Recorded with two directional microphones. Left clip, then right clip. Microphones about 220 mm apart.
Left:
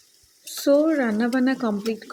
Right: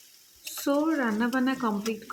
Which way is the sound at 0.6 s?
20° left (ahead or behind).